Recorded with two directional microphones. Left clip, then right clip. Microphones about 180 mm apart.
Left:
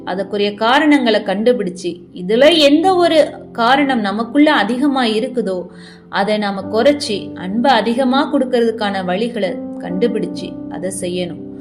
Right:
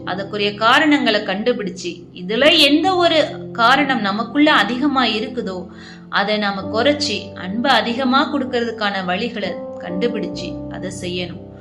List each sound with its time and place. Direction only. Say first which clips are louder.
0.1 s a woman's voice: left 3 dB; 40° left (ahead or behind)
10.8 s a woman's voice: left 5 dB; 45° left (ahead or behind)